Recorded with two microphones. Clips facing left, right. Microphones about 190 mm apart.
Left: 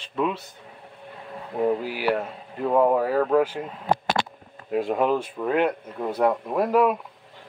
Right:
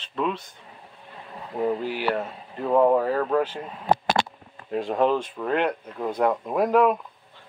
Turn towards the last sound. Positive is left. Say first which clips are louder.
# right 1 dB
turn(degrees=5)  # may be behind; listen again after turning